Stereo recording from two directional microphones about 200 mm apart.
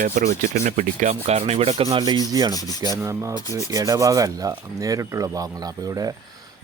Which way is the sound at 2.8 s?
15° right (ahead or behind).